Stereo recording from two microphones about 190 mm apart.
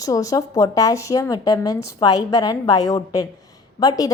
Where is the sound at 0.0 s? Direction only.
20° left (ahead or behind).